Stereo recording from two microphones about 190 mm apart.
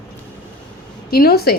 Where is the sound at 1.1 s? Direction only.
55° left (ahead or behind).